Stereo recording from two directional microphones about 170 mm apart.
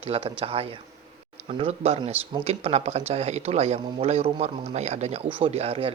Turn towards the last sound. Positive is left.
turn(degrees=-35)  # may be behind; listen again after turning